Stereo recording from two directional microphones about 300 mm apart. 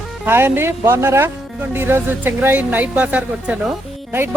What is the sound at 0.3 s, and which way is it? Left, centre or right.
A woman's voice, centre.